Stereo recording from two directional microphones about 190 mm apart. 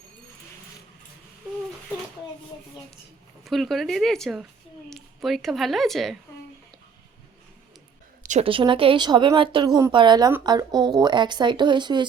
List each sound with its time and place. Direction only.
3.4 s a woman's voice: centre (ahead or behind)
8.2 s a sound: 40° right (ahead or behind)
8.4 s speech: 25° right (ahead or behind)